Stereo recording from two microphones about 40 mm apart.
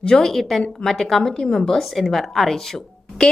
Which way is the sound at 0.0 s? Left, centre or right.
Left.